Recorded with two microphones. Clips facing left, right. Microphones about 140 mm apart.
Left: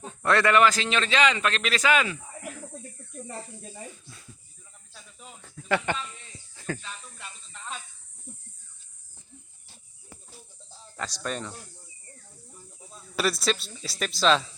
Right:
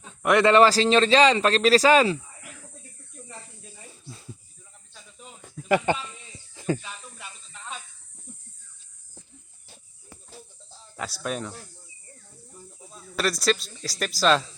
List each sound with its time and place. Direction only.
0.2 s a man's voice: 20° right (ahead or behind)
0.5 s speech: 35° right (ahead or behind)
5.4 s a sound: 15° right (ahead or behind)
6.6 s snake: 15° right (ahead or behind)
10.9 s speech: 10° right (ahead or behind)
12.9 s speech: centre (ahead or behind)